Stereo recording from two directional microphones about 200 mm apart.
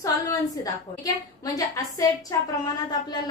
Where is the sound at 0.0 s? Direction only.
15° left (ahead or behind).